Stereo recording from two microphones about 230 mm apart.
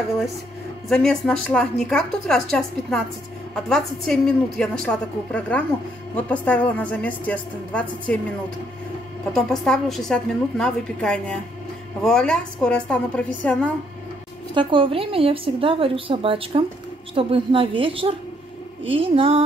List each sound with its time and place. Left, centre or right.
0.8 s a woman's voice: centre
3.5 s a woman's voice: centre
9.3 s a woman's voice: centre
14.5 s a woman's voice: right